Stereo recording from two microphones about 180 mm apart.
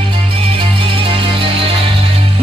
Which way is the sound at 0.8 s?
30° right (ahead or behind).